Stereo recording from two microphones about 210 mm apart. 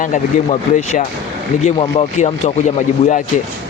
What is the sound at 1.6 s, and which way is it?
Speech, 30° left (ahead or behind).